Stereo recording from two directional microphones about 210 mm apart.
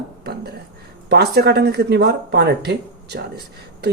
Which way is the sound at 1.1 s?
50° right (ahead or behind).